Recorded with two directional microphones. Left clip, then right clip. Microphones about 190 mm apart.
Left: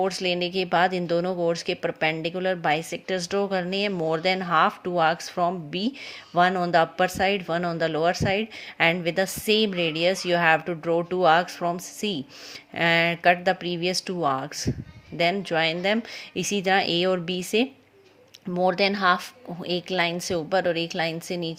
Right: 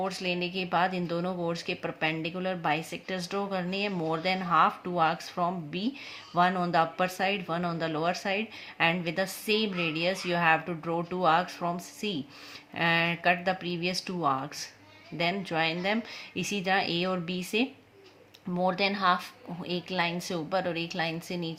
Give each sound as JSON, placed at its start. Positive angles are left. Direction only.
{"t": 0.0, "sound": "speech", "side_deg": 35}